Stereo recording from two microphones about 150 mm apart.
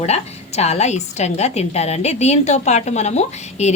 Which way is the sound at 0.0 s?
45° left (ahead or behind).